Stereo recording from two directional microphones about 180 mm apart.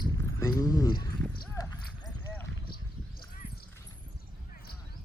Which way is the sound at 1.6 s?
20° left (ahead or behind).